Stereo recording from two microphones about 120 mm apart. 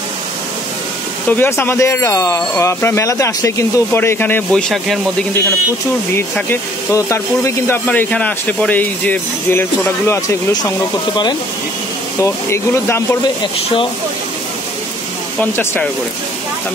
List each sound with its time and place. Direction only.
1.3 s speech: 20° left (ahead or behind); by 5.0 s 5° left (ahead or behind)
6.5 s speech: 25° left (ahead or behind)
12.2 s speech: 20° left (ahead or behind)
15.3 s speech: 15° left (ahead or behind)